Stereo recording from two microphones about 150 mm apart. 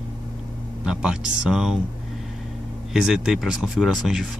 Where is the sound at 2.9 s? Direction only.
Centre (ahead or behind).